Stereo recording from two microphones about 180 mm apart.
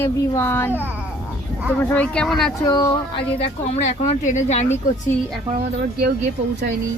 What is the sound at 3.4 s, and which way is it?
Speech, 40° left (ahead or behind).